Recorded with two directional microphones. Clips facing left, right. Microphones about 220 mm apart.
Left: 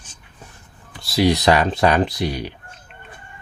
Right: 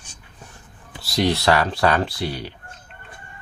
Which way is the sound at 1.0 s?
Centre (ahead or behind).